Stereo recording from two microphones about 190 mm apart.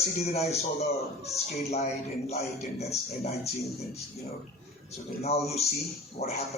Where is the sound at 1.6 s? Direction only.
35° left (ahead or behind).